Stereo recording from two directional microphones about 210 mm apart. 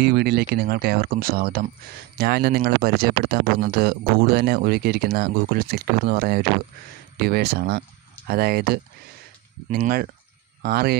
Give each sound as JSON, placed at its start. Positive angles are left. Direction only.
{"t": 0.0, "sound": "speech", "side_deg": -50}